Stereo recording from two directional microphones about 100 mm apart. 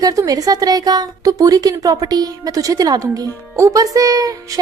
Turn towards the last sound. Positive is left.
turn(degrees=-35)  # may be behind; listen again after turning